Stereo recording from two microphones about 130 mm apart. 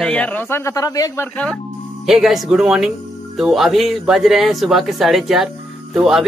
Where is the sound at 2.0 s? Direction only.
Centre (ahead or behind).